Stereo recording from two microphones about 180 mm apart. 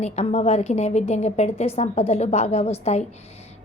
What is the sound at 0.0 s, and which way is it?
A woman's voice, 35° left (ahead or behind).